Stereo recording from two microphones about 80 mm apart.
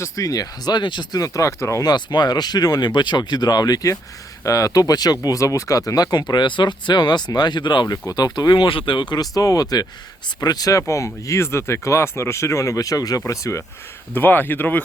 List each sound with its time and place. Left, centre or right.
0.0 s speech: left
1.2 s speech: left
1.8 s speech: left
8.0 s speech: left
9.3 s speech: left
14.1 s speech: left